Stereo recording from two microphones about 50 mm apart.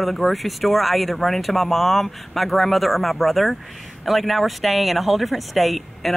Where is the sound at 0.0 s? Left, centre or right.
Centre.